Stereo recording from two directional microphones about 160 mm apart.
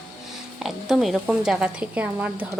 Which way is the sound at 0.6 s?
Centre (ahead or behind).